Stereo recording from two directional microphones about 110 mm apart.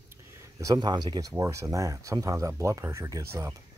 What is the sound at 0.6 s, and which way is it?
Speech, 40° right (ahead or behind).